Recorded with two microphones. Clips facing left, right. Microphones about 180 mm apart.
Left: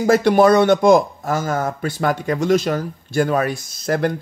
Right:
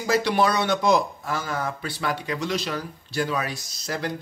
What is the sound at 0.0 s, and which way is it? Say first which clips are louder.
Speech: left 8 dB; 50° left (ahead or behind).